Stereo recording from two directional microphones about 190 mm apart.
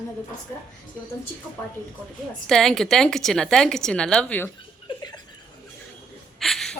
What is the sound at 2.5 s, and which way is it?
Speech, centre (ahead or behind).